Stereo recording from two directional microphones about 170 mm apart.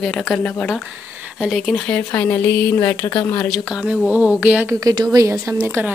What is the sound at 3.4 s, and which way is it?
Speech, centre (ahead or behind).